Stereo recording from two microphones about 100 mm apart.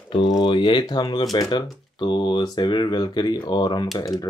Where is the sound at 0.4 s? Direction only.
50° left (ahead or behind).